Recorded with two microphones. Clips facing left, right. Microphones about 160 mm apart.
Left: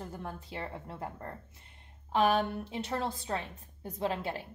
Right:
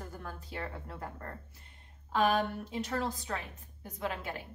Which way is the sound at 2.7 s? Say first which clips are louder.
Right 1 dB; 25° left (ahead or behind).